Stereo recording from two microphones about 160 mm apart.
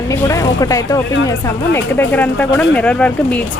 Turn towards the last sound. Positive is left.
turn(degrees=10)  # may be behind; listen again after turning